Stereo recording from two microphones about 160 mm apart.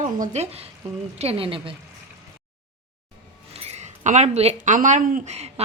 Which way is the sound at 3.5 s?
40° right (ahead or behind).